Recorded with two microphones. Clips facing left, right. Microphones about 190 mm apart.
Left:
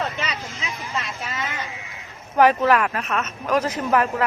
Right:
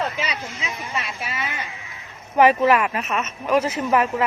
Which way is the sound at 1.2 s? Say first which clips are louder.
Even; 15° right (ahead or behind).